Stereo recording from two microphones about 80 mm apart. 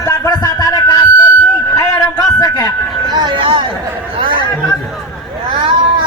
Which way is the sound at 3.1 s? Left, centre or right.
Right.